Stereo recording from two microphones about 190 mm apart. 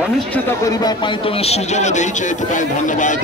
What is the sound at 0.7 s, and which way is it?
Speech, 25° left (ahead or behind).